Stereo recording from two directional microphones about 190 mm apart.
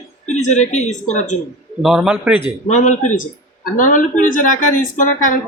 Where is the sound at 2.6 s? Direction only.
40° left (ahead or behind).